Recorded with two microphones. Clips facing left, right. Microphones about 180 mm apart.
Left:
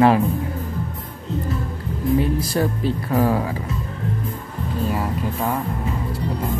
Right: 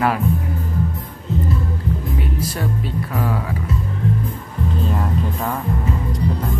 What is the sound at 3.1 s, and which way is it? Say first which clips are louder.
Speech: left 5 dB; 35° left (ahead or behind).